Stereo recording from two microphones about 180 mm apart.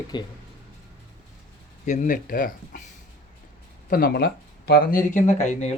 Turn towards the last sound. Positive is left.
turn(degrees=40)  # may be behind; listen again after turning